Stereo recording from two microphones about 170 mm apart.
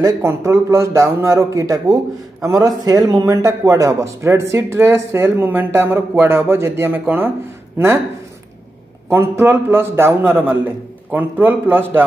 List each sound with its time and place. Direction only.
0.0 s a man's voice: 15° right (ahead or behind)
9.4 s speech: 15° right (ahead or behind)